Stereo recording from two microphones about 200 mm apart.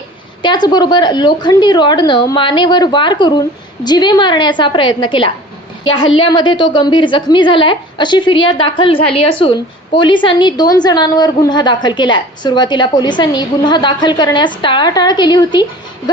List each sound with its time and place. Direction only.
0.4 s a woman's voice: 20° left (ahead or behind)